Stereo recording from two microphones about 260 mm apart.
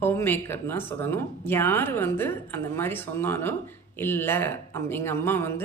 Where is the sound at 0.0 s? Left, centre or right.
Centre.